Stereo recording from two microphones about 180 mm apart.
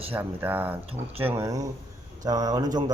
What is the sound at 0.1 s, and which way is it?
Speech, 10° right (ahead or behind).